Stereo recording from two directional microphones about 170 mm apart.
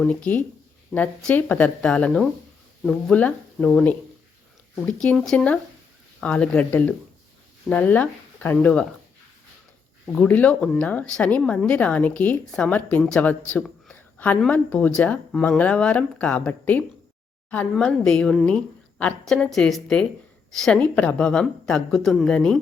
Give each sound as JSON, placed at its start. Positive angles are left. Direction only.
{"t": 0.0, "sound": "a woman's voice", "side_deg": 5}
{"t": 10.2, "sound": "a woman's voice", "side_deg": 10}